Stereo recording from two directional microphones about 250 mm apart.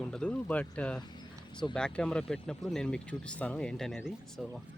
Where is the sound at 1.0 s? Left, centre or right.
Centre.